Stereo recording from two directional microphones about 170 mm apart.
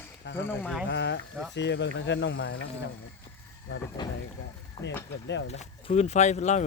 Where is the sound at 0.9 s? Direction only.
90° left.